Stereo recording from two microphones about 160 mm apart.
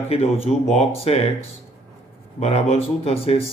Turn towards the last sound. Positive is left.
turn(degrees=40)  # may be behind; listen again after turning